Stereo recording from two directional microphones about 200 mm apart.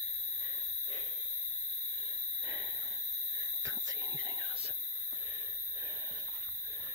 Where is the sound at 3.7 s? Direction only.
20° right (ahead or behind).